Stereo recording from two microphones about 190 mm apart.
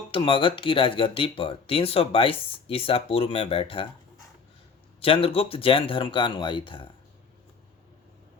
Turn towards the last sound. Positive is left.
turn(degrees=25)  # may be behind; listen again after turning